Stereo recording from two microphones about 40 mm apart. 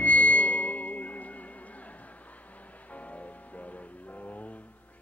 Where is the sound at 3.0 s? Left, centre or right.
Left.